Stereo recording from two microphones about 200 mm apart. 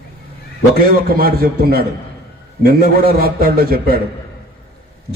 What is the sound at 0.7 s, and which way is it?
A man's voice, 50° right (ahead or behind).